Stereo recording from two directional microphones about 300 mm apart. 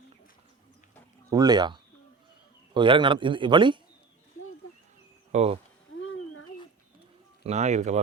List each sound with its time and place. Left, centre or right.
1.3 s a man's voice: centre
5.3 s speech: right
6.0 s a sound: left
7.4 s speech: right